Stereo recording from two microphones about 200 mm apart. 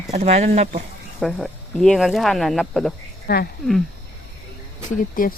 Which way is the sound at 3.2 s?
50° left (ahead or behind).